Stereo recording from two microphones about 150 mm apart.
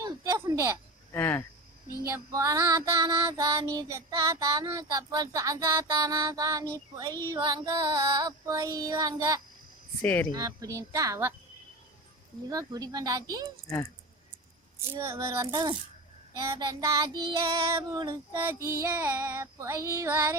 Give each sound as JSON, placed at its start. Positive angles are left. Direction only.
{"t": 0.0, "sound": "a sound", "side_deg": -25}
{"t": 1.1, "sound": "speech", "side_deg": 15}
{"t": 2.0, "sound": "child singing", "side_deg": -20}
{"t": 10.0, "sound": "speech", "side_deg": 10}
{"t": 10.3, "sound": "child singing", "side_deg": -25}
{"t": 12.5, "sound": "child singing", "side_deg": -25}
{"t": 13.7, "sound": "speech", "side_deg": 25}
{"t": 14.8, "sound": "child singing", "side_deg": -15}
{"t": 18.3, "sound": "child singing", "side_deg": -15}